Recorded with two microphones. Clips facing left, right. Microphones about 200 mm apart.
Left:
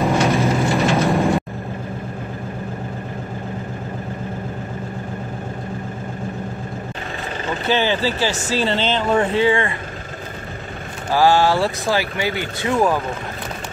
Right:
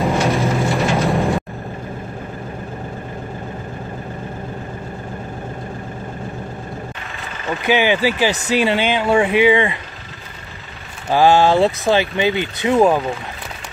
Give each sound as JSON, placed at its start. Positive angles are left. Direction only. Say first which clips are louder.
{"t": 0.0, "sound": "vehicle", "louder": "even", "side_deg": 0}
{"t": 7.6, "sound": "speech", "louder": "right 3 dB", "side_deg": -15}
{"t": 11.1, "sound": "speech", "louder": "right 2 dB", "side_deg": -20}